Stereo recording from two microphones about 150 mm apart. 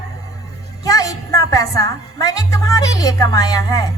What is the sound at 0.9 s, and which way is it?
A woman's voice, 25° left (ahead or behind).